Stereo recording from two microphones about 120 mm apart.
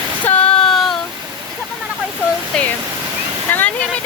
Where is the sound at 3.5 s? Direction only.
15° left (ahead or behind).